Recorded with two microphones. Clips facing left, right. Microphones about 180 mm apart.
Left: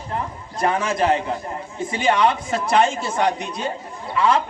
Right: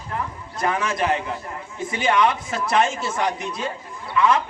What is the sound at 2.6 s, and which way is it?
Speech, 30° left (ahead or behind).